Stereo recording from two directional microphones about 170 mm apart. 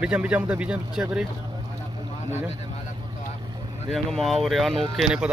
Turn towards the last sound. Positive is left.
turn(degrees=-5)  # may be behind; listen again after turning